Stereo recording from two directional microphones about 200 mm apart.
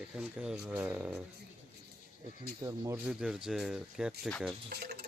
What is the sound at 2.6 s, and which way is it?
Speech, 15° right (ahead or behind).